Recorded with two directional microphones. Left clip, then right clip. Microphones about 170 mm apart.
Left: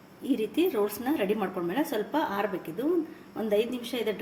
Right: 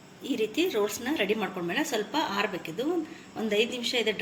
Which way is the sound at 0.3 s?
35° left (ahead or behind).